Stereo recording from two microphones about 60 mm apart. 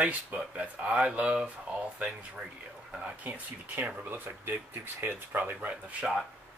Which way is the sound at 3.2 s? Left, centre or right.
Right.